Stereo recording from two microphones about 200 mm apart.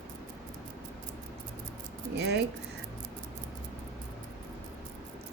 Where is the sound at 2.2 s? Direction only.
55° right (ahead or behind).